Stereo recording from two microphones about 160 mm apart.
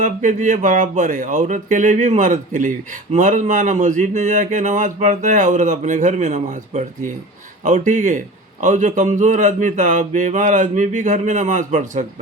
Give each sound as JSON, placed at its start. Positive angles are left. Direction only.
{"t": 0.0, "sound": "speech", "side_deg": -50}